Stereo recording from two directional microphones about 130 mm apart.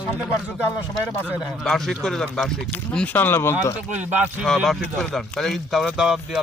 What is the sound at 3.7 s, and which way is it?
Speech, 10° right (ahead or behind).